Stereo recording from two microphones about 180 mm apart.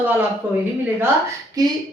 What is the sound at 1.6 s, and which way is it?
Speech, 20° right (ahead or behind).